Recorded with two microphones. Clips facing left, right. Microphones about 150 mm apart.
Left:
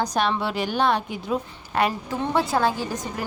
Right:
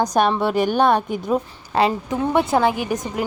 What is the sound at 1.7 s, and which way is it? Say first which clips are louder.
Speech: right 4 dB; 25° right (ahead or behind).